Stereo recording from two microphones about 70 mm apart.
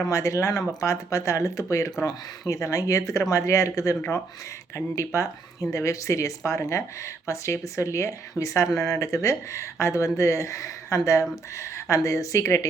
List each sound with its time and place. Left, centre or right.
0.0 s speech: left
4.9 s speech: left